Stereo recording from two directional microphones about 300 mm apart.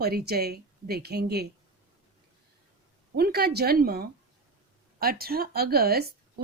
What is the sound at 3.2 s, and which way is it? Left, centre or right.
Speech, right.